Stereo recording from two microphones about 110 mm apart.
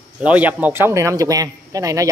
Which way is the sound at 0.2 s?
15° right (ahead or behind).